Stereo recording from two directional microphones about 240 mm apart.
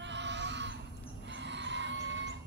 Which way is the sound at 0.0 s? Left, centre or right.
Right.